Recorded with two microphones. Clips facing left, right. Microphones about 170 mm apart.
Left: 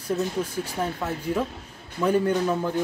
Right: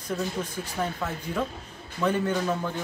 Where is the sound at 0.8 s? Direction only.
20° left (ahead or behind).